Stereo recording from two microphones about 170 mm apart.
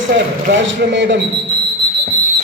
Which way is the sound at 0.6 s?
90° right.